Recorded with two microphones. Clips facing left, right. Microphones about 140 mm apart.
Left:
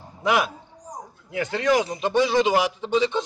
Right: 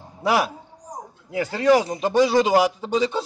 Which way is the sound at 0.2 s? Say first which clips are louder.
Right 1 dB; 35° right (ahead or behind).